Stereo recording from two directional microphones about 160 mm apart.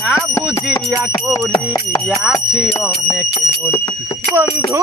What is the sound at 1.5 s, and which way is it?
Speech, 25° left (ahead or behind).